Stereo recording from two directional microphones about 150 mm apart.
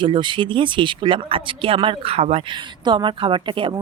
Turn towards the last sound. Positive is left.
turn(degrees=-35)  # may be behind; listen again after turning